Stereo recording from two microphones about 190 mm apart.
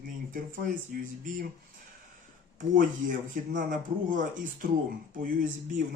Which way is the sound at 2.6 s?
45° right (ahead or behind).